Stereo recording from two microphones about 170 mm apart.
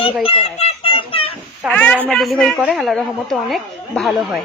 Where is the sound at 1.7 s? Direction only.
10° left (ahead or behind).